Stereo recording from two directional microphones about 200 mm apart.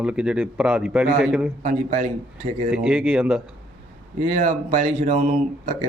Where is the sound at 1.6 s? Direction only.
40° right (ahead or behind).